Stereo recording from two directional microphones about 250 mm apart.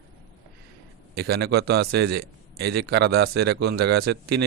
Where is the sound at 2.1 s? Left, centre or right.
Right.